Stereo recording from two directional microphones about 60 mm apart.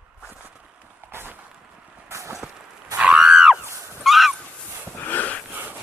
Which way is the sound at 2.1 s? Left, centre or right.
Right.